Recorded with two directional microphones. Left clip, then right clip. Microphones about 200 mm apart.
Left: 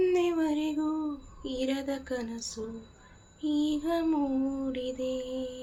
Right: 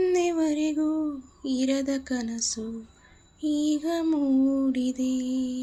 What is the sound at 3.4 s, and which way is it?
Lullaby, 45° right (ahead or behind).